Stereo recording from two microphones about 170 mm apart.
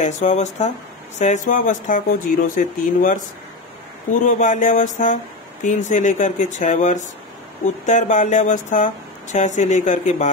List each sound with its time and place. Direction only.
0.0 s speech: 45° left (ahead or behind)